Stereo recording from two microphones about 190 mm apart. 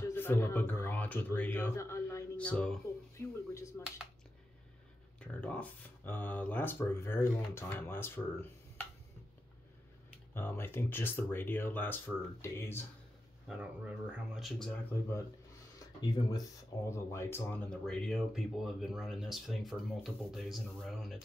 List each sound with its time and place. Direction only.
0.1 s speech: 10° left (ahead or behind)
5.2 s speech: 5° left (ahead or behind)
10.3 s speech: 10° left (ahead or behind)
13.5 s speech: 5° right (ahead or behind)
16.0 s speech: 20° left (ahead or behind); by 21.2 s centre (ahead or behind)